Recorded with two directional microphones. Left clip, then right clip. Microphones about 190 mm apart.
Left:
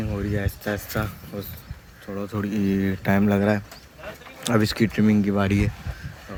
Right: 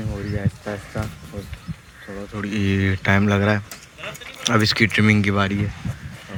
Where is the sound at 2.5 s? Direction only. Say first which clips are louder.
Right 4 dB; 10° right (ahead or behind).